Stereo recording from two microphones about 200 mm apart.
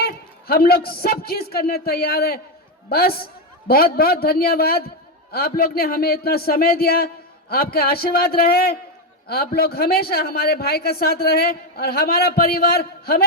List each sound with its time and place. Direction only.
0.0 s a man's voice: 50° left (ahead or behind)